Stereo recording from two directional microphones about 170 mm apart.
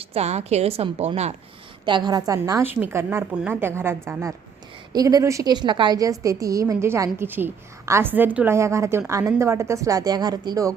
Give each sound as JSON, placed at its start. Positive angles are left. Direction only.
{"t": 0.0, "sound": "a woman's voice", "side_deg": -35}
{"t": 1.8, "sound": "a woman's voice", "side_deg": -25}